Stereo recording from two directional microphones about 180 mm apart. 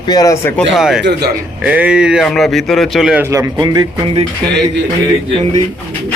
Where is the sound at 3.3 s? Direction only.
20° right (ahead or behind).